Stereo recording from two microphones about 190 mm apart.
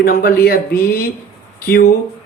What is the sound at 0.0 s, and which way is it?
Speech, 50° left (ahead or behind).